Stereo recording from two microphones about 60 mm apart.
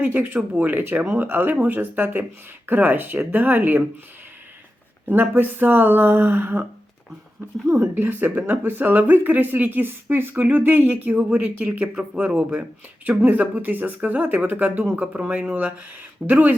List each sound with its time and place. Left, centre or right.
0.0 s speech: right
5.0 s speech: right
7.7 s speech: right
15.0 s speech: centre